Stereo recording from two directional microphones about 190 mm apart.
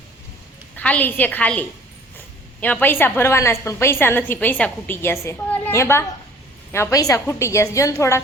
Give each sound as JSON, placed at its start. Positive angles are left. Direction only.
{"t": 0.8, "sound": "a woman's voice", "side_deg": 5}